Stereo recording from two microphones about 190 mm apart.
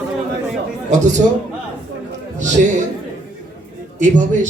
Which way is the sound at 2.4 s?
40° right (ahead or behind).